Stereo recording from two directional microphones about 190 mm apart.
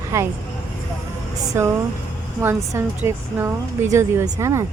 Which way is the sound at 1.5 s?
15° right (ahead or behind).